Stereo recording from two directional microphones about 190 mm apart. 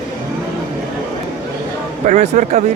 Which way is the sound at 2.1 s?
40° right (ahead or behind).